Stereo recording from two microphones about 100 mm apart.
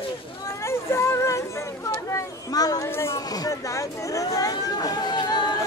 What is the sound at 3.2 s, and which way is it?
Chatter, 40° left (ahead or behind).